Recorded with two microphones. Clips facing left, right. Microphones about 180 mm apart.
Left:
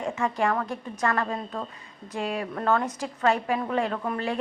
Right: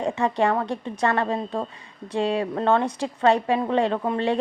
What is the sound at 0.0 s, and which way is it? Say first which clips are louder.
A woman's voice: right 4 dB; 35° right (ahead or behind).